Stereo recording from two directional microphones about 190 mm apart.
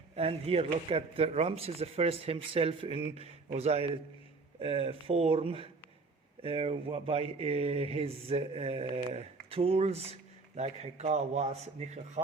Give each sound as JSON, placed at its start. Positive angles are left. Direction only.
{"t": 0.2, "sound": "a man's voice", "side_deg": -30}